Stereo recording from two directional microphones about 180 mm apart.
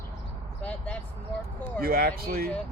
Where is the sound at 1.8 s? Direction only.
55° right (ahead or behind).